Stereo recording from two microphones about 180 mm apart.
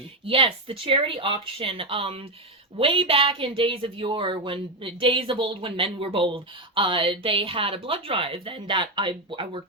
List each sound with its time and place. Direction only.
0.3 s speech: 30° right (ahead or behind)